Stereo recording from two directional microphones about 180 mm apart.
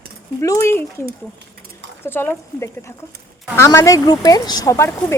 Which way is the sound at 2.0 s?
10° left (ahead or behind).